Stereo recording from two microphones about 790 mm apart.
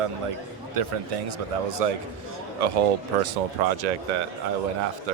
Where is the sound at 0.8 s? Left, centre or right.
Right.